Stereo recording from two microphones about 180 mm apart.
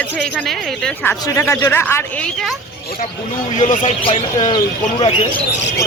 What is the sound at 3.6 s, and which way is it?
Speech, 35° left (ahead or behind).